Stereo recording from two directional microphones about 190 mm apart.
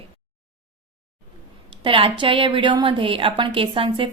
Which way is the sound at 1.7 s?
25° right (ahead or behind).